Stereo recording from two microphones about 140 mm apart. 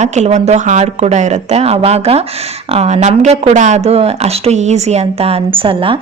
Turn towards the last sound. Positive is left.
turn(degrees=-40)  # may be behind; listen again after turning